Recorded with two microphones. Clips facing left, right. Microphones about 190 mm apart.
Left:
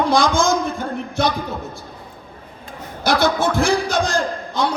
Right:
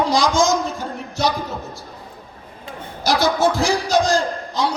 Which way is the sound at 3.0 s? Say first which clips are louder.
Even; 55° left (ahead or behind).